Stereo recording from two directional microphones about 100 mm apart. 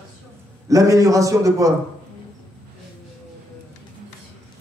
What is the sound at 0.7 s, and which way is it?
A man's voice, 35° right (ahead or behind).